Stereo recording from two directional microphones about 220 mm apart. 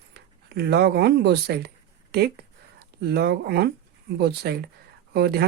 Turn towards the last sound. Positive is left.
turn(degrees=-45)  # may be behind; listen again after turning